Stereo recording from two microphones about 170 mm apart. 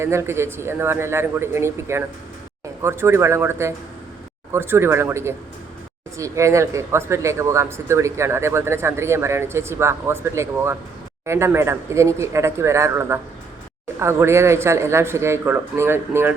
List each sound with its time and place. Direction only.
0.0 s speech: 15° right (ahead or behind)